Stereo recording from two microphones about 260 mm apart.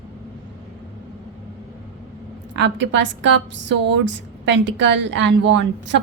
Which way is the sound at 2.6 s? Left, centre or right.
Right.